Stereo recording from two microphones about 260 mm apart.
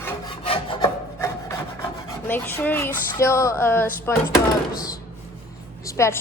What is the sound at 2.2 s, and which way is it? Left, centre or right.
Speech, centre.